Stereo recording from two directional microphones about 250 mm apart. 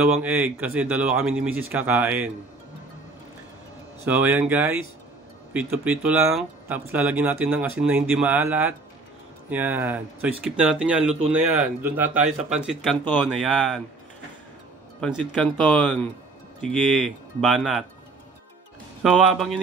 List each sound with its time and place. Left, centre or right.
0.0 s speech: centre
4.0 s speech: centre
15.0 s speech: centre
19.0 s speech: centre